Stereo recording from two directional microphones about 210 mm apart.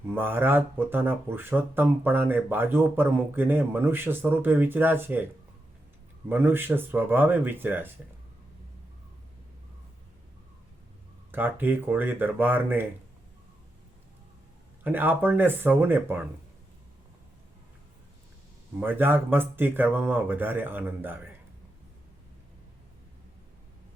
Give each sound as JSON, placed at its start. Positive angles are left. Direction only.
{"t": 0.1, "sound": "speech", "side_deg": -10}
{"t": 11.3, "sound": "speech", "side_deg": -10}
{"t": 14.8, "sound": "speech", "side_deg": -10}
{"t": 18.8, "sound": "speech", "side_deg": -10}